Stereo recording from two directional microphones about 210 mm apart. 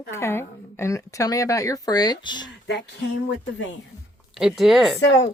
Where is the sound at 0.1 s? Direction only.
10° left (ahead or behind).